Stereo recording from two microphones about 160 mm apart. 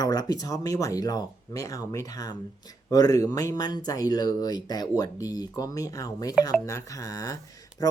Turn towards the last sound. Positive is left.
turn(degrees=20)  # may be behind; listen again after turning